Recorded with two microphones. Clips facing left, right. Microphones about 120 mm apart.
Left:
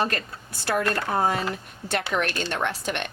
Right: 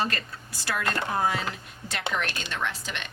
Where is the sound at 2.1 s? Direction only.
50° left (ahead or behind).